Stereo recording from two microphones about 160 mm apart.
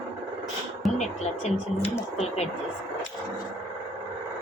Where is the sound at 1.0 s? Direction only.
45° left (ahead or behind).